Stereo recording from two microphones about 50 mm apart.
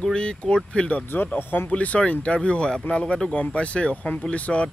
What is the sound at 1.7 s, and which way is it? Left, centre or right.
Speech, left.